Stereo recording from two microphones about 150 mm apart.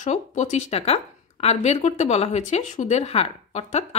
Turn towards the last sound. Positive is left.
turn(degrees=50)  # may be behind; listen again after turning